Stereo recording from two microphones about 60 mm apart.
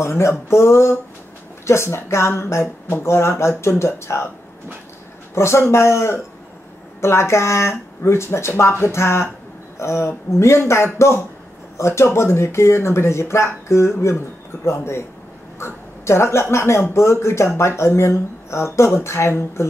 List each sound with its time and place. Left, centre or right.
0.0 s speech: left
5.3 s speech: left